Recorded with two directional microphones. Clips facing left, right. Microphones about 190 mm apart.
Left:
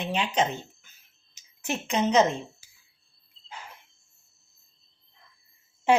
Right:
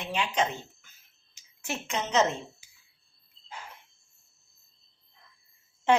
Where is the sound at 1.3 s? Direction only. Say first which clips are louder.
Left 4 dB; 20° left (ahead or behind).